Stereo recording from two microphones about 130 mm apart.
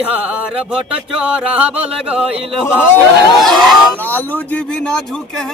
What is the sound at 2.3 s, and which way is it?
Speech, 45° right (ahead or behind).